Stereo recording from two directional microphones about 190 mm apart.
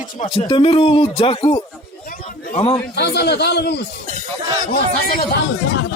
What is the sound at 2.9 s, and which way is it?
Speech, 60° left (ahead or behind).